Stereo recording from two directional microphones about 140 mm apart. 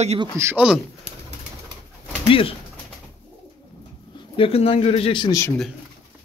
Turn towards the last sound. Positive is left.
turn(degrees=35)  # may be behind; listen again after turning